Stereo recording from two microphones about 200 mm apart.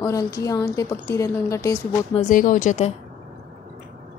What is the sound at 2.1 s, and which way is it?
Speech, 40° left (ahead or behind).